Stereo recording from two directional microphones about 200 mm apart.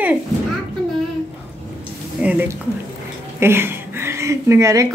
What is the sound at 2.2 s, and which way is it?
A woman's voice, 10° right (ahead or behind).